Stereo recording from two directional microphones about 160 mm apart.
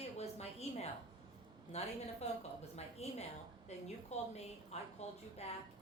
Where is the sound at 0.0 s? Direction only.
40° left (ahead or behind).